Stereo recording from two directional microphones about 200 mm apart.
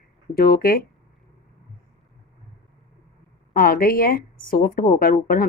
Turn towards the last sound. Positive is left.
turn(degrees=45)  # may be behind; listen again after turning